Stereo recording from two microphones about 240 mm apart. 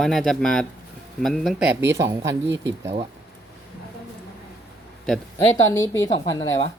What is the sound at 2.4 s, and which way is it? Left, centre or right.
Speech, right.